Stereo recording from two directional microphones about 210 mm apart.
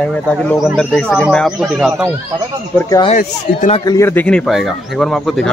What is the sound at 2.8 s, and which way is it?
Speech, 15° left (ahead or behind).